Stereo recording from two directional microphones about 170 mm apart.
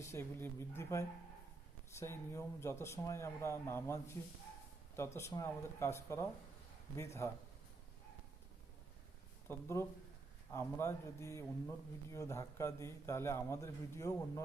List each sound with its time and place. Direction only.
0.0 s a man's voice: 15° left (ahead or behind)
9.5 s a man's voice: 15° left (ahead or behind)